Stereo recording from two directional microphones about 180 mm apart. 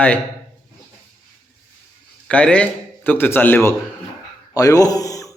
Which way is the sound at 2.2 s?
5° left (ahead or behind).